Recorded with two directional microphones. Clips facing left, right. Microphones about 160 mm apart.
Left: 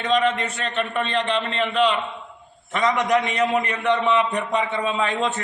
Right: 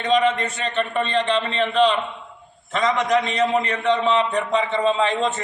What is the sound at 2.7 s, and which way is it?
Speech, 10° left (ahead or behind).